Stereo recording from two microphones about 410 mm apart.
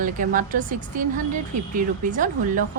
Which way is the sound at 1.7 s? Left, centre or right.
Centre.